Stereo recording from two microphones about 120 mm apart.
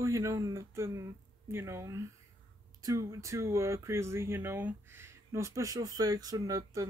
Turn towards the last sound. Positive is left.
turn(degrees=-30)  # may be behind; listen again after turning